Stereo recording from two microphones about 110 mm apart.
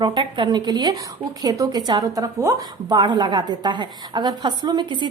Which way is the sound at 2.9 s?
45° right (ahead or behind).